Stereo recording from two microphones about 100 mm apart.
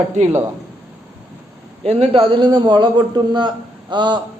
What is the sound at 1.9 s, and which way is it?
Speech, 70° right (ahead or behind).